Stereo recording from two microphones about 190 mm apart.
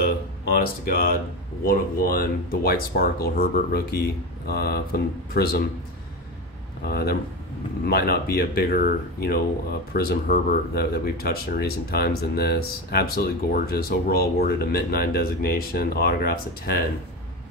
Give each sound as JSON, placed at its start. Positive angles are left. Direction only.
{"t": 0.5, "sound": "speech", "side_deg": 50}
{"t": 6.9, "sound": "speech", "side_deg": 55}